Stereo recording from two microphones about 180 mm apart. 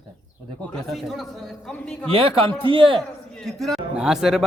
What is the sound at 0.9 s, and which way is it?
Speech, centre (ahead or behind).